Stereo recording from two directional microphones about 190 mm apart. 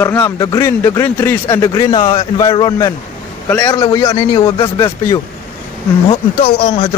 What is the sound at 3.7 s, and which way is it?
Speech, 20° left (ahead or behind).